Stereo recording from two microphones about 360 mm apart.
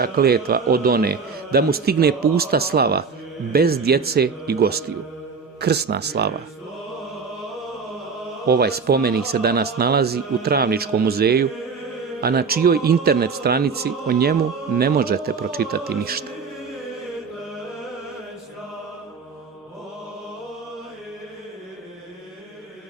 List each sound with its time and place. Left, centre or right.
0.0 s a man's voice: right
8.4 s a man's voice: right